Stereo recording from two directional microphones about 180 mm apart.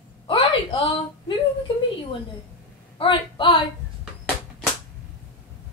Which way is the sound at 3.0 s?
30° left (ahead or behind).